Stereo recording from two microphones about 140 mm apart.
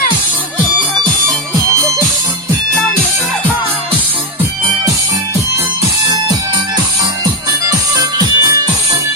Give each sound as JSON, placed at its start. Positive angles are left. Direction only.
{"t": 6.1, "sound": "music", "side_deg": -25}
{"t": 7.7, "sound": "music", "side_deg": -25}